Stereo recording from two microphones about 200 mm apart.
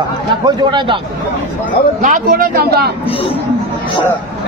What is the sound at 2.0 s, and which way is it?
Speech, 45° right (ahead or behind).